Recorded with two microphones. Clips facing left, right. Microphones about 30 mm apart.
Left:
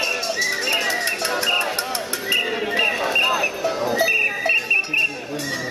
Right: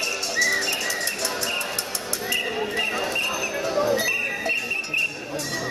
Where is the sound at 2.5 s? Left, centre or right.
Left.